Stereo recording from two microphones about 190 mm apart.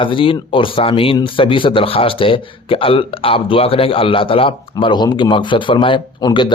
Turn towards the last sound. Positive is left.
turn(degrees=25)  # may be behind; listen again after turning